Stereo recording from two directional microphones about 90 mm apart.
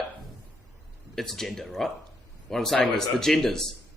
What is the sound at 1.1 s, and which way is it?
Speech, 5° left (ahead or behind).